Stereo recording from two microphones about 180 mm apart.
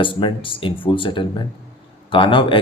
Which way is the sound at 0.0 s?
25° left (ahead or behind).